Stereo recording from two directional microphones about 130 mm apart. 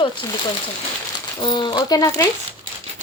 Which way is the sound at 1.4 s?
40° left (ahead or behind).